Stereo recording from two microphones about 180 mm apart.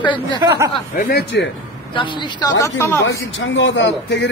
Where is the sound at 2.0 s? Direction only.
20° left (ahead or behind).